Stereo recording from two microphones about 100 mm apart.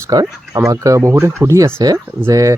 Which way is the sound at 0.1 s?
35° right (ahead or behind).